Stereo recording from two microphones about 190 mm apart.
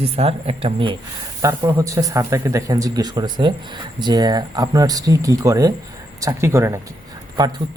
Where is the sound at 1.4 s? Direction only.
15° right (ahead or behind).